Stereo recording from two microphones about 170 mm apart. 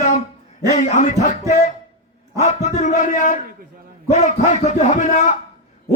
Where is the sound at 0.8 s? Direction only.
45° left (ahead or behind).